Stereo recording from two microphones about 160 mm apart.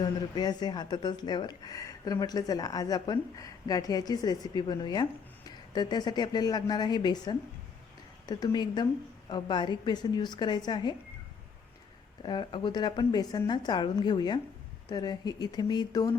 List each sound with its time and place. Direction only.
0.0 s speech: 25° left (ahead or behind)
12.2 s speech: 30° left (ahead or behind)